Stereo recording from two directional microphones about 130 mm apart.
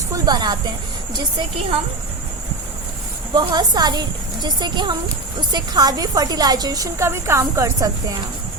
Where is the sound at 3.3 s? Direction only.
35° right (ahead or behind).